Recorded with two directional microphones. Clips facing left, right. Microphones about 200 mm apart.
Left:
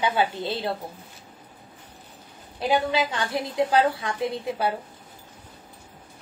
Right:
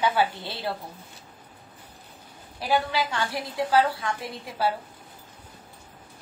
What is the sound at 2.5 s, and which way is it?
A woman's voice, 20° left (ahead or behind).